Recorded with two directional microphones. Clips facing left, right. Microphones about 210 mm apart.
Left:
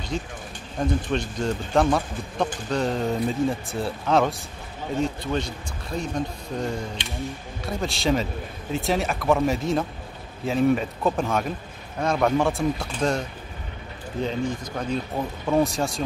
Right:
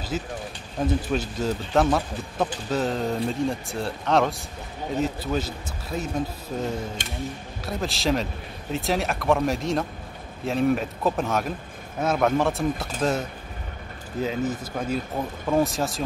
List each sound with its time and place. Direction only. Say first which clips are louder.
0.1 s speech: right 1 dB; 5° right (ahead or behind)
7.0 s speech: even; 45° right (ahead or behind)
7.6 s speech: left 1 dB; centre (ahead or behind)
14.2 s speech: even; 5° right (ahead or behind)